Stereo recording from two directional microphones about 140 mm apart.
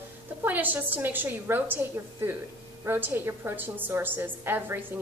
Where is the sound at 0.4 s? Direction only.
10° right (ahead or behind).